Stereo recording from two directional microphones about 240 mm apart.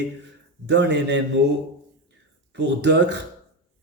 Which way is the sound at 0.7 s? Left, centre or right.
Right.